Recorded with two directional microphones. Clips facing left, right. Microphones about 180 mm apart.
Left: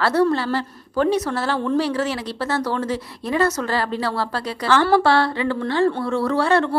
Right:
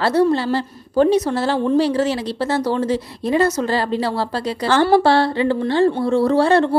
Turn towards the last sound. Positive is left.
turn(degrees=-30)  # may be behind; listen again after turning